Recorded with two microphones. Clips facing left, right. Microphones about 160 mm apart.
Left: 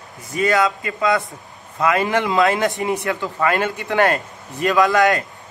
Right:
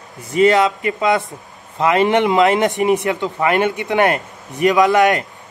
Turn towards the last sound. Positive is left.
turn(degrees=-20)  # may be behind; listen again after turning